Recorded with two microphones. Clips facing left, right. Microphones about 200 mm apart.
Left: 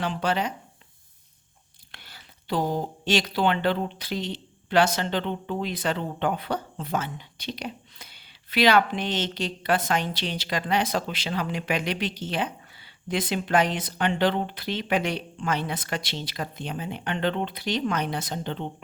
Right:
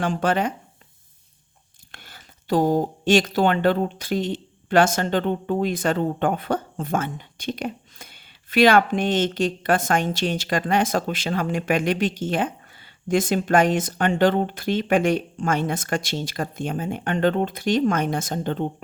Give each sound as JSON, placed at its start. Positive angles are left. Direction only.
{"t": 0.0, "sound": "speech", "side_deg": -50}
{"t": 1.9, "sound": "speech", "side_deg": -50}